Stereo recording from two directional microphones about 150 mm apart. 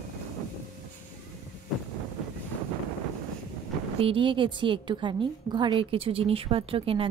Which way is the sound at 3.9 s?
35° right (ahead or behind).